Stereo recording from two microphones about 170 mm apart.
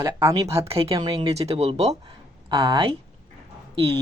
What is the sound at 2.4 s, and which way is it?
Speech, 25° right (ahead or behind).